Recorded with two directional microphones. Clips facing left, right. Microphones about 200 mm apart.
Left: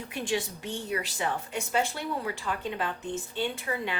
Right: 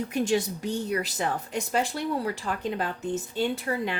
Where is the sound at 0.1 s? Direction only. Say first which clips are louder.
Right 4 dB; 40° right (ahead or behind).